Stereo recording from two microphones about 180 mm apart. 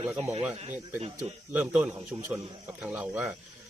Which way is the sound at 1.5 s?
10° right (ahead or behind).